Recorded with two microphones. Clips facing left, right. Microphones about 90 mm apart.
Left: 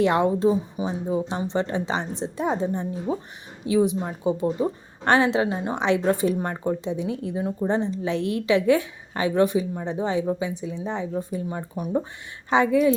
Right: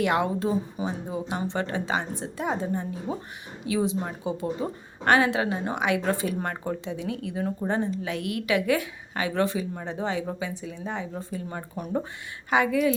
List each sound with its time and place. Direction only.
0.0 s speech: 25° left (ahead or behind)
11.7 s speech: 10° left (ahead or behind)
12.5 s speech: 25° left (ahead or behind)